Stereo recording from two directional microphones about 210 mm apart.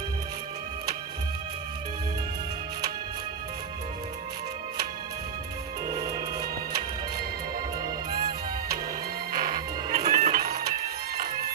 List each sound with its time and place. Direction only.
6.1 s music: 50° right (ahead or behind)
8.1 s music: 45° right (ahead or behind)